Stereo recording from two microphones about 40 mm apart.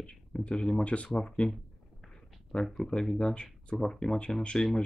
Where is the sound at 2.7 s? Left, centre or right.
Centre.